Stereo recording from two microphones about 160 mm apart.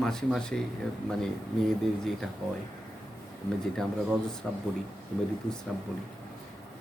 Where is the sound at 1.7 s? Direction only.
5° left (ahead or behind).